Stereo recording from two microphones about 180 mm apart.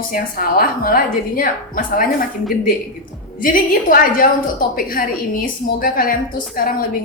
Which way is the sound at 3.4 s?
50° left (ahead or behind).